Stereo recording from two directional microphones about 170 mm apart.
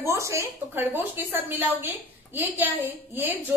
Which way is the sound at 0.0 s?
15° right (ahead or behind).